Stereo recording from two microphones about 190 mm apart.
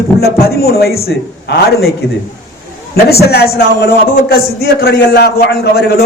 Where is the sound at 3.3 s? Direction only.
55° left (ahead or behind).